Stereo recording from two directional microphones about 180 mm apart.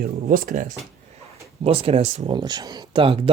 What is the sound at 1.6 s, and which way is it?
Speech, 35° right (ahead or behind).